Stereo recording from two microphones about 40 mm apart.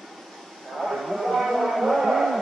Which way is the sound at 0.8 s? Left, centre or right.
Centre.